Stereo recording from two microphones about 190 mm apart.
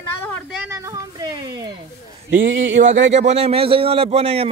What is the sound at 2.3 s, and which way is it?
A man's voice, 40° right (ahead or behind).